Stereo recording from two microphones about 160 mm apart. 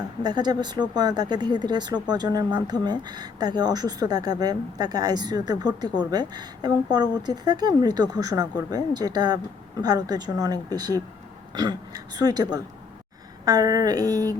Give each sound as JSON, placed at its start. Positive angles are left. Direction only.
{"t": 0.2, "sound": "speech", "side_deg": -25}